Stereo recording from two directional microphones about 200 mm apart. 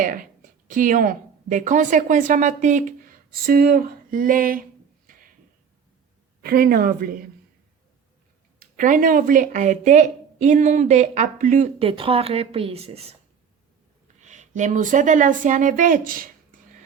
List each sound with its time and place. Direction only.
0.0 s speech: 45° right (ahead or behind)
5.1 s a sound: 40° right (ahead or behind)
6.4 s speech: 50° right (ahead or behind)
8.5 s speech: 40° right (ahead or behind)
14.2 s speech: 40° right (ahead or behind)